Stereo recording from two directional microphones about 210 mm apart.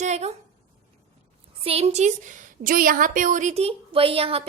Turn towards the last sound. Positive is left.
turn(degrees=-25)  # may be behind; listen again after turning